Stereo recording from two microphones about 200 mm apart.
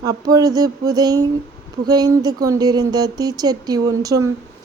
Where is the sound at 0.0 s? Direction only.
20° right (ahead or behind).